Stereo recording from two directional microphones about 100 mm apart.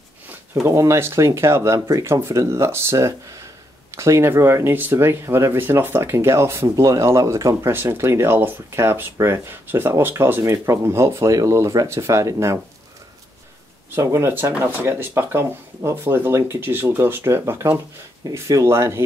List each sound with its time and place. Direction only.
0.7 s speech: 30° right (ahead or behind)
13.8 s speech: 25° right (ahead or behind)